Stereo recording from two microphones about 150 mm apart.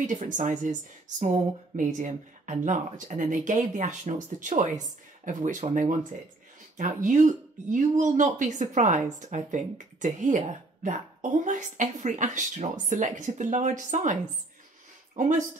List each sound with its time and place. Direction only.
0.0 s speech: 60° right (ahead or behind)
15.1 s speech: 55° right (ahead or behind)